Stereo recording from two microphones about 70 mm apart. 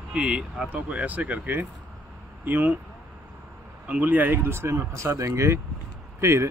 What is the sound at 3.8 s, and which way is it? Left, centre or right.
Speech, right.